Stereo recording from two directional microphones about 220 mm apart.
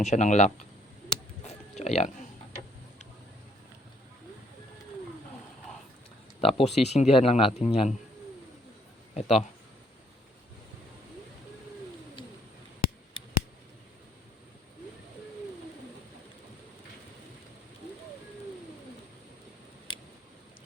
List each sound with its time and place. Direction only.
0.0 s speech: 30° left (ahead or behind)
1.1 s a sound: 30° left (ahead or behind)
6.4 s speech: 25° left (ahead or behind)
9.1 s speech: 30° left (ahead or behind)
19.9 s tick: 20° left (ahead or behind)